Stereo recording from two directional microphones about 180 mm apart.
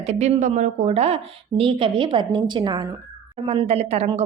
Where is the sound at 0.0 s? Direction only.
40° right (ahead or behind).